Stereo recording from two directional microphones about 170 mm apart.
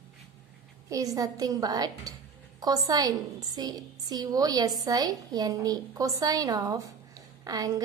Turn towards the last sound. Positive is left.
turn(degrees=-20)  # may be behind; listen again after turning